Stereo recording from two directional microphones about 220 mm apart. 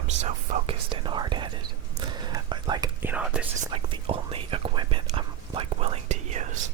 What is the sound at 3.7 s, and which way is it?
Whispering, 25° right (ahead or behind).